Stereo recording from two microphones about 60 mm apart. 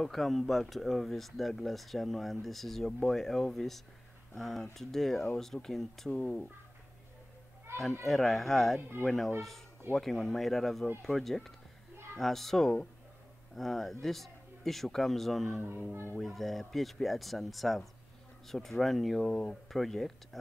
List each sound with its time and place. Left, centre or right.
0.0 s speech: centre
6.1 s speech: centre
8.0 s speech: centre